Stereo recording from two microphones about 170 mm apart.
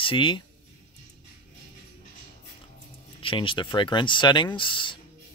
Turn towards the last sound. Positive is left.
turn(degrees=30)  # may be behind; listen again after turning